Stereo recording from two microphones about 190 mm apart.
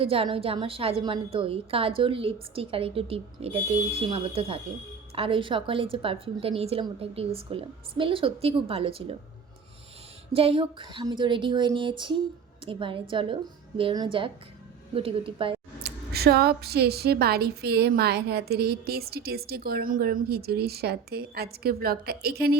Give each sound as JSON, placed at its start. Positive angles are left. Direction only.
{"t": 0.0, "sound": "a woman's voice", "side_deg": -30}
{"t": 10.3, "sound": "a woman's voice", "side_deg": -30}
{"t": 15.8, "sound": "a woman's voice", "side_deg": -55}